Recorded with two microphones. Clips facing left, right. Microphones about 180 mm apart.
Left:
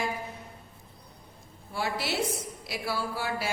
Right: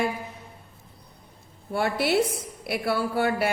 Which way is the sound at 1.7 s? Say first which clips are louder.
Right 8 dB; 60° right (ahead or behind).